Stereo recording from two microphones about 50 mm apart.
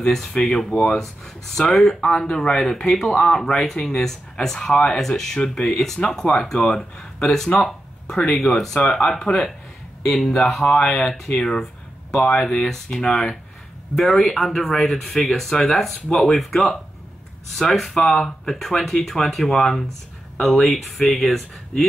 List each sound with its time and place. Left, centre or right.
0.0 s speech: centre